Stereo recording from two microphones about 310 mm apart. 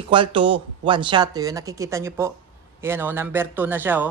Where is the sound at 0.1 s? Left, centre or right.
Centre.